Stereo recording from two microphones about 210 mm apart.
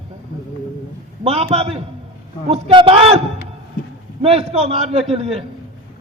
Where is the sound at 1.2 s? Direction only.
30° right (ahead or behind).